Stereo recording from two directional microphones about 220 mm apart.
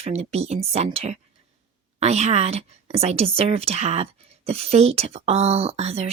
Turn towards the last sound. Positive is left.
turn(degrees=-30)  # may be behind; listen again after turning